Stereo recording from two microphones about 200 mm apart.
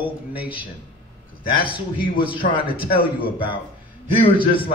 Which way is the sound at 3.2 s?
25° left (ahead or behind).